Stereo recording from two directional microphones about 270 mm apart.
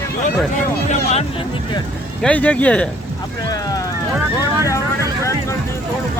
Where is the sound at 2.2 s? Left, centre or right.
Centre.